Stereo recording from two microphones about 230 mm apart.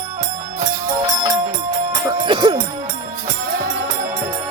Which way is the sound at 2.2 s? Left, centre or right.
Right.